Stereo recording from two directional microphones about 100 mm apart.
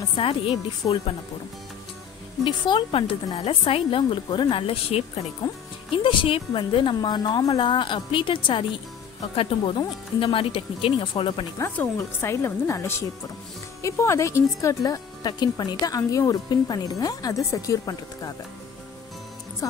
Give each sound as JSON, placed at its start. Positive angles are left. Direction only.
{"t": 0.1, "sound": "a woman's voice", "side_deg": 65}
{"t": 2.4, "sound": "a woman's voice", "side_deg": 50}
{"t": 3.3, "sound": "a woman's voice", "side_deg": 75}
{"t": 5.4, "sound": "speech", "side_deg": 45}
{"t": 5.9, "sound": "a woman's voice", "side_deg": 65}
{"t": 9.3, "sound": "a woman's voice", "side_deg": 70}
{"t": 12.2, "sound": "a woman's voice", "side_deg": 25}
{"t": 19.6, "sound": "speech", "side_deg": 35}